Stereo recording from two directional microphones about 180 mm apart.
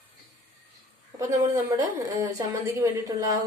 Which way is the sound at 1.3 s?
20° right (ahead or behind).